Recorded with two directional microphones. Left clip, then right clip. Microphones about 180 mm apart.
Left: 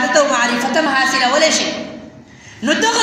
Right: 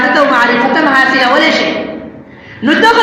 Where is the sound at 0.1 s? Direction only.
45° left (ahead or behind).